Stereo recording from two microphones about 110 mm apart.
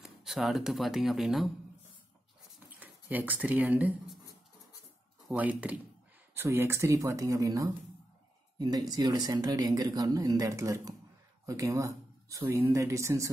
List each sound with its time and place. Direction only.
0.0 s speech: 5° right (ahead or behind)
2.8 s speech: 15° right (ahead or behind)
5.3 s speech: 15° right (ahead or behind)